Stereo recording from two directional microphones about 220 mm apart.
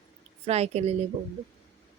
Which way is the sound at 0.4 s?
30° right (ahead or behind).